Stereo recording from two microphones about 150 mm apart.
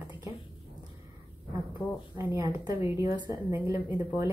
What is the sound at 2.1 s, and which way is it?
Speech, 25° right (ahead or behind).